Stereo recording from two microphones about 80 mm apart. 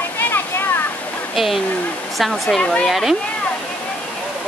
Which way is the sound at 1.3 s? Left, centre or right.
Centre.